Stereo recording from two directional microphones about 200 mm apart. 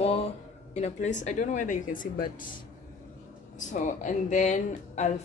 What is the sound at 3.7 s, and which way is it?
A woman's voice, 40° left (ahead or behind).